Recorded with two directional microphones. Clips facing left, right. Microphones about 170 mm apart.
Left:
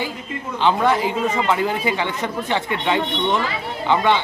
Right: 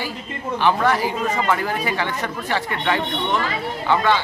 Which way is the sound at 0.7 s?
20° left (ahead or behind).